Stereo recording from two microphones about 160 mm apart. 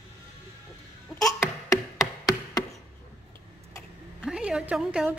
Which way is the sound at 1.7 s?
20° left (ahead or behind).